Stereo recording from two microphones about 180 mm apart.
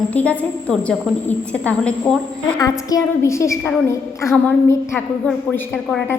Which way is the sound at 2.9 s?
20° left (ahead or behind).